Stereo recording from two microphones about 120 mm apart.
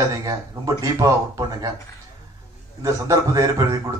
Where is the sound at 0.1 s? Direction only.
30° right (ahead or behind).